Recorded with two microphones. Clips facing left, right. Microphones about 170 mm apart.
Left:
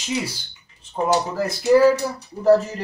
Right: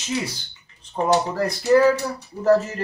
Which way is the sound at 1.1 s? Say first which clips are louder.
Right 1 dB; 5° left (ahead or behind).